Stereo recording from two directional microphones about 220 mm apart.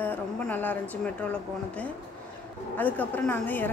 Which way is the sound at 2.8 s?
5° left (ahead or behind).